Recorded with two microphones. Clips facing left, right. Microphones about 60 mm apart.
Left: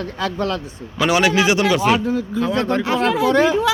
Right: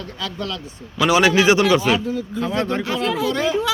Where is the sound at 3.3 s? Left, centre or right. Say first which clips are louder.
Left 6 dB; left.